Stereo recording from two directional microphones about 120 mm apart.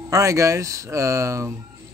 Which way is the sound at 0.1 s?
25° right (ahead or behind).